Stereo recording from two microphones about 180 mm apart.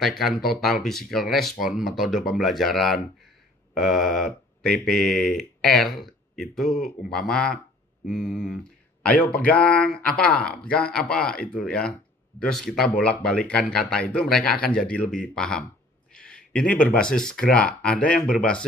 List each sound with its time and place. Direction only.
0.2 s speech: centre (ahead or behind)
8.2 s speech: 55° left (ahead or behind)
9.6 s speech: 5° left (ahead or behind)